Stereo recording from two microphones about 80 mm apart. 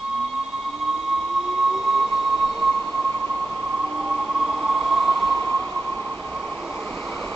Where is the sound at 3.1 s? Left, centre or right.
Centre.